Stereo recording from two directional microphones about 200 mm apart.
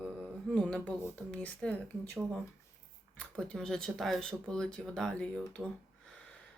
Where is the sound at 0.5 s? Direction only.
5° left (ahead or behind).